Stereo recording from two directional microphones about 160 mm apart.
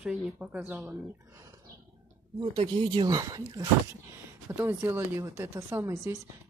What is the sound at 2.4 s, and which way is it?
Speech, 35° right (ahead or behind).